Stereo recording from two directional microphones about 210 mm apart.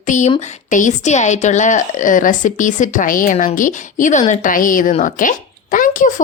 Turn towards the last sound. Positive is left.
turn(degrees=40)  # may be behind; listen again after turning